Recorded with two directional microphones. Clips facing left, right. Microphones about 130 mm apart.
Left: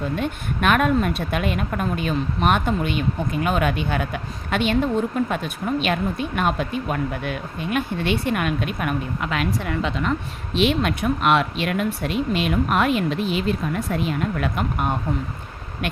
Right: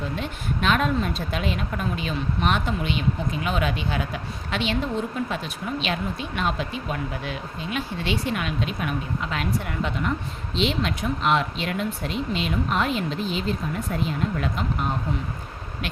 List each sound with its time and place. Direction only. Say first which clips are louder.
0.2 s a woman's voice: left 4 dB; 60° left (ahead or behind)